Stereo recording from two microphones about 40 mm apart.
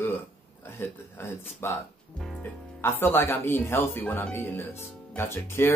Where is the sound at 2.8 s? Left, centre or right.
Left.